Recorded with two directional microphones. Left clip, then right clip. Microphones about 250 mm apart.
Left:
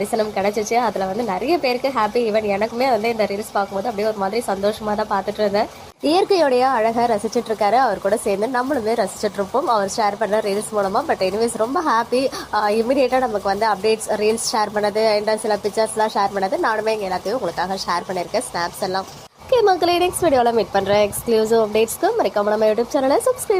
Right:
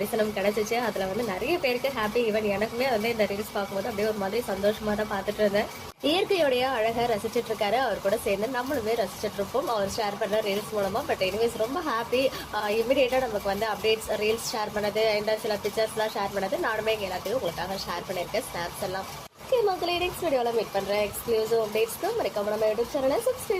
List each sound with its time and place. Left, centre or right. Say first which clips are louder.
0.3 s a woman's voice: left 7 dB; left
11.9 s a woman's voice: left 6 dB; left